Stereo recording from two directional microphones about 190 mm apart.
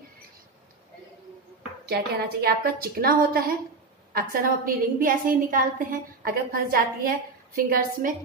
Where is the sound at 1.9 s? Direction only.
55° right (ahead or behind).